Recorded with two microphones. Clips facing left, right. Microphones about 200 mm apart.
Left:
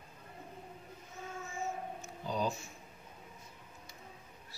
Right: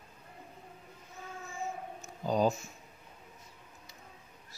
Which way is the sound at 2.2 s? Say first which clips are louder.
Right 7 dB; 45° right (ahead or behind).